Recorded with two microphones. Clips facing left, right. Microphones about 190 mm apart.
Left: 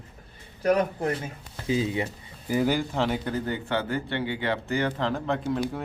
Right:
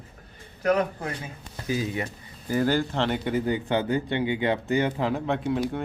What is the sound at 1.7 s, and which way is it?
Speech, 25° left (ahead or behind).